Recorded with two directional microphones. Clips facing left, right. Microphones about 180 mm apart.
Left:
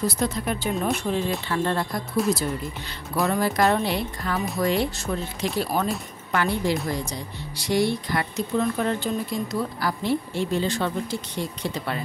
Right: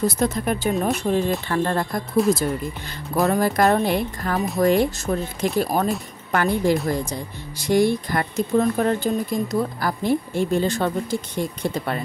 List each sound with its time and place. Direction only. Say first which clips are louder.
0.0 s speech: right 4 dB; 50° right (ahead or behind)
3.3 s speech: right 3 dB; 45° right (ahead or behind)